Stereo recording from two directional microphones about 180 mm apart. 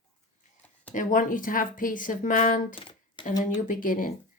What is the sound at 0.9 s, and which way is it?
Speech, 45° left (ahead or behind).